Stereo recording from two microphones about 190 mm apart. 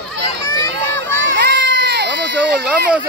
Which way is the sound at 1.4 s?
65° right (ahead or behind).